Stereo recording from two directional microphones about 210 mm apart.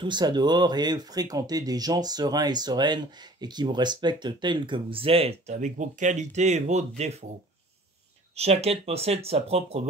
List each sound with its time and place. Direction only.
0.0 s speech: 20° right (ahead or behind)
8.4 s speech: 30° right (ahead or behind)